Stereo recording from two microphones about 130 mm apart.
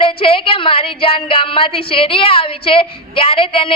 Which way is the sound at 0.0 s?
45° left (ahead or behind).